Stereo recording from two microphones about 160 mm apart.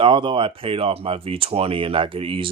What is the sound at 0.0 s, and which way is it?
Speech, 30° right (ahead or behind).